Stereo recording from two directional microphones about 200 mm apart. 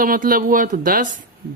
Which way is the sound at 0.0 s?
45° right (ahead or behind).